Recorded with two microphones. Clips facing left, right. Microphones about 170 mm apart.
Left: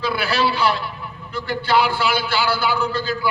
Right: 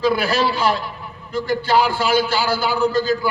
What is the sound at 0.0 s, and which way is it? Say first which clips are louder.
A man's voice: right 3 dB; 45° right (ahead or behind).